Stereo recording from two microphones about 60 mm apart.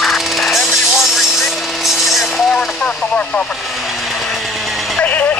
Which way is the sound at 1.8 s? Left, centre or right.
Centre.